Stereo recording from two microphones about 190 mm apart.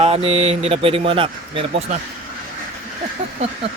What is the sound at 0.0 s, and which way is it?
Speech, 30° right (ahead or behind).